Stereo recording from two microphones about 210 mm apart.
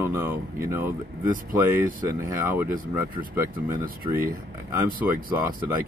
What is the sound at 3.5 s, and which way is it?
Speech, 40° right (ahead or behind).